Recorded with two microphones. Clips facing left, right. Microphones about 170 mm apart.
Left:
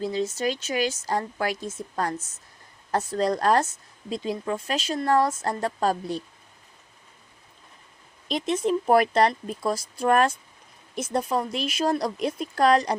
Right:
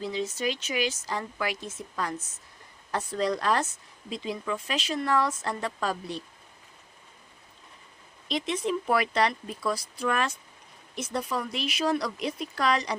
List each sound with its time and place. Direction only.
0.0 s speech: 40° left (ahead or behind)
8.4 s speech: 45° left (ahead or behind)